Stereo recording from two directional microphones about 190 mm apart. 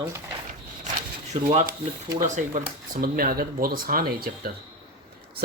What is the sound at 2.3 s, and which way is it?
Speech, 40° right (ahead or behind).